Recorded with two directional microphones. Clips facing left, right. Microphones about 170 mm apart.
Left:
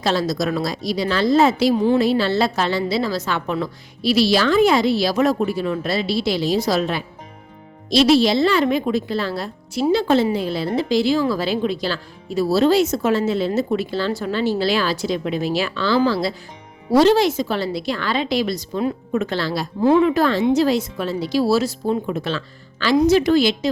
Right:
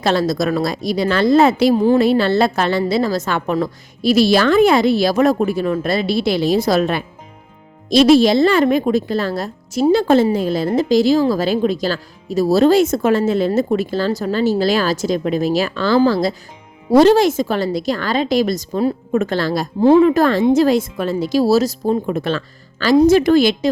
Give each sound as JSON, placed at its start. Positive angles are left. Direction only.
{"t": 0.0, "sound": "a woman's voice", "side_deg": -55}
{"t": 19.8, "sound": "a woman's voice", "side_deg": -35}